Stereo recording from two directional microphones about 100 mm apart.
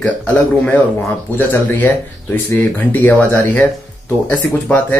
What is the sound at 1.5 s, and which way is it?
Speech, 20° left (ahead or behind).